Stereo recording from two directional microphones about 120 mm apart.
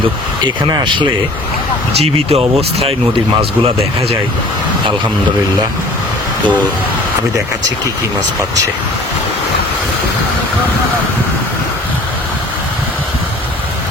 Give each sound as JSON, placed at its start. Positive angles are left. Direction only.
{"t": 0.4, "sound": "speech", "side_deg": -40}
{"t": 2.0, "sound": "speech", "side_deg": -55}